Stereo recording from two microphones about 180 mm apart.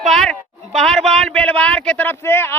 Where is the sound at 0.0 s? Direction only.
Centre (ahead or behind).